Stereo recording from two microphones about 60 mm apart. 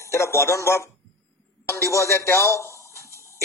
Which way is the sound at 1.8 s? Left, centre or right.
Left.